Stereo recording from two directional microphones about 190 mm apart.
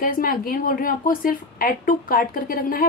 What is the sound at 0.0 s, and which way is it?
A woman's voice, 50° left (ahead or behind).